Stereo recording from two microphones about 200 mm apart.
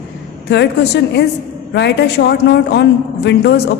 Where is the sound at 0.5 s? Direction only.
60° left (ahead or behind).